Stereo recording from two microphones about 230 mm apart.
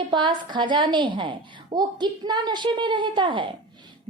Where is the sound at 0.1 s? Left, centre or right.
Centre.